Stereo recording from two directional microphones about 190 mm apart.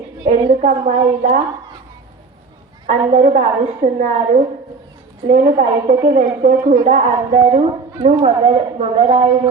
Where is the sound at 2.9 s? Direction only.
35° right (ahead or behind).